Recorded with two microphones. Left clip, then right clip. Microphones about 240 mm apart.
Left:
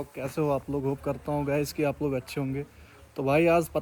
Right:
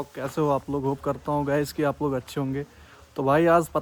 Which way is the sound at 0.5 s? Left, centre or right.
Right.